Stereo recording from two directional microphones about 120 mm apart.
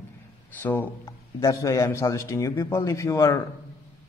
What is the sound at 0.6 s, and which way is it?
A man's voice, 15° left (ahead or behind).